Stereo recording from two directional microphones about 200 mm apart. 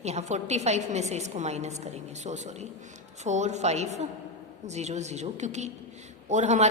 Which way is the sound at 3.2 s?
35° right (ahead or behind).